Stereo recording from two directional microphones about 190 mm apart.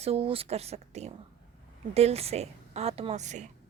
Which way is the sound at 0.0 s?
30° right (ahead or behind).